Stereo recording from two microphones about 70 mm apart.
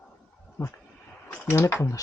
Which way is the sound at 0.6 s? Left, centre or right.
Left.